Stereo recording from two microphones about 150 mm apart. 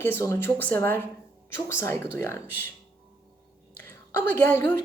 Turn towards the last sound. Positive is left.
turn(degrees=15)  # may be behind; listen again after turning